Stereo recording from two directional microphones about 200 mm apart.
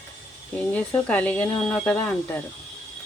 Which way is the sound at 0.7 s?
5° left (ahead or behind).